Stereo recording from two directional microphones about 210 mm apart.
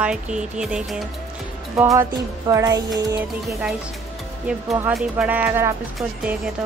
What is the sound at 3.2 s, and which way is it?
Speech, 5° right (ahead or behind).